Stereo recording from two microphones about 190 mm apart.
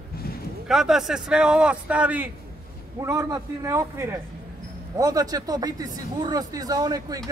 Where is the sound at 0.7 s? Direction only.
Centre (ahead or behind).